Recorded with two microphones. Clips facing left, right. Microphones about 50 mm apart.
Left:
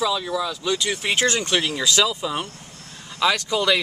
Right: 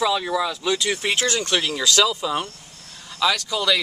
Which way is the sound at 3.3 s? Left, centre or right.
Left.